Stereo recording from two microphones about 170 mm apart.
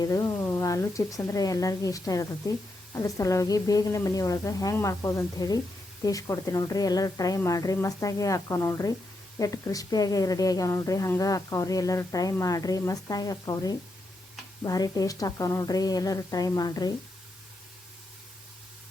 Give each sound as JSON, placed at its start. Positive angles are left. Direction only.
{"t": 0.0, "sound": "a woman's voice", "side_deg": 20}